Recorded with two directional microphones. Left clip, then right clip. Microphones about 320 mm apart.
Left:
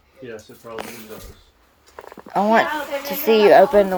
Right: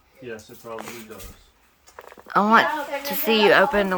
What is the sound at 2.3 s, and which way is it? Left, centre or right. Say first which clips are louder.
A child's voice: even; centre.